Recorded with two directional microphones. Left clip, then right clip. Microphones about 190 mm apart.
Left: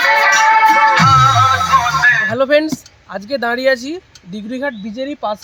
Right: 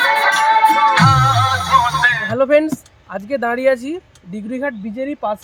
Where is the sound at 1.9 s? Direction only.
5° right (ahead or behind).